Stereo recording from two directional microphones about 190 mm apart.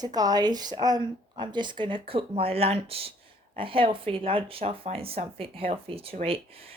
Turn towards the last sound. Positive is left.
turn(degrees=-30)  # may be behind; listen again after turning